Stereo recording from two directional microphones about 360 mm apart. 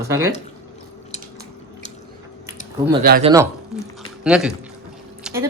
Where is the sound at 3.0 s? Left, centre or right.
Right.